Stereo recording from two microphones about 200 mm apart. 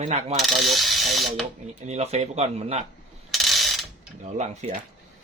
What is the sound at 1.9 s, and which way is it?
Speech, 35° right (ahead or behind).